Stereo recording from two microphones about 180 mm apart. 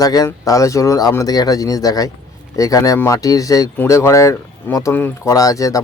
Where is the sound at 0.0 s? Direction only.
20° left (ahead or behind).